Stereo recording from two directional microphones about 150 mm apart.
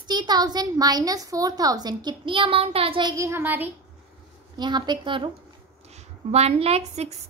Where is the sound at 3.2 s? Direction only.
15° right (ahead or behind).